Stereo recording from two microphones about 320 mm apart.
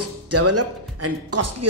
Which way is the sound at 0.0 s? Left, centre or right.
Right.